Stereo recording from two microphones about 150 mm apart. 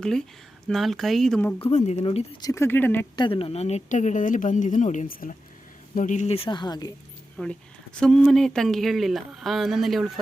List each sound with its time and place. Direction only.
0.0 s speech: 5° left (ahead or behind)
1.6 s speech: 45° left (ahead or behind)
2.4 s speech: 20° left (ahead or behind)
3.2 s a woman's voice: 35° left (ahead or behind)
7.4 s speech: 5° left (ahead or behind)